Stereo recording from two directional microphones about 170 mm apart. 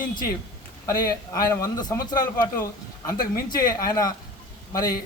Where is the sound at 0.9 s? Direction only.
20° left (ahead or behind).